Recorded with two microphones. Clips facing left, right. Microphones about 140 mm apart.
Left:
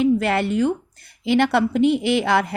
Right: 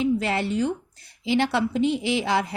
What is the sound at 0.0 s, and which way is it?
A woman's voice, 55° left (ahead or behind).